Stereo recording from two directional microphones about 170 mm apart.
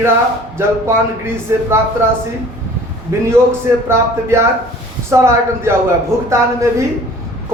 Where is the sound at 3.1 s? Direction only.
15° right (ahead or behind).